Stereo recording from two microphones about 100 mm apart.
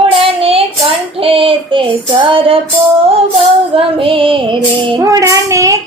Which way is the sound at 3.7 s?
65° right (ahead or behind).